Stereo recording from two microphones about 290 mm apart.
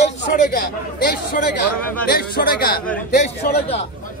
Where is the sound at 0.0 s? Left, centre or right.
Left.